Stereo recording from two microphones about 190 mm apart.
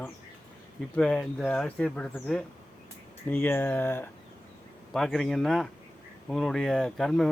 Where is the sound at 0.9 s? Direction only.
5° left (ahead or behind).